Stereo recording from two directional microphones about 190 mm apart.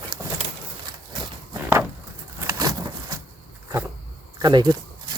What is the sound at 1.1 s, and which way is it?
Walk, 20° right (ahead or behind).